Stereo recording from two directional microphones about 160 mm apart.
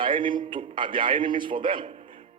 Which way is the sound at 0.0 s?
30° right (ahead or behind).